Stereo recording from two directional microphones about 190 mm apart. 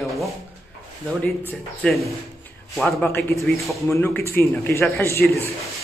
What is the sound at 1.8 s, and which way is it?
Speech, centre (ahead or behind).